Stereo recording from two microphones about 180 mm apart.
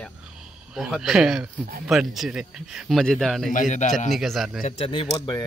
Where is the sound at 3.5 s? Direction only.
45° left (ahead or behind).